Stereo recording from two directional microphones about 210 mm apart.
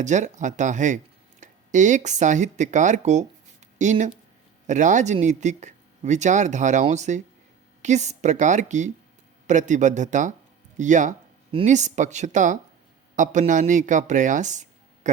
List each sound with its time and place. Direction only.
0.0 s speech: 35° right (ahead or behind)